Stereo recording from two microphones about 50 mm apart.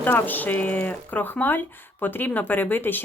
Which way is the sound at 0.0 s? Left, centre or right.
Left.